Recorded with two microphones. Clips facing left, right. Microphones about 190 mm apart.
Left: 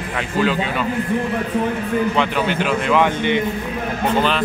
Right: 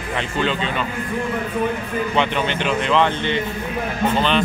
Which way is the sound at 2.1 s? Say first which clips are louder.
Left 1 dB; 5° left (ahead or behind).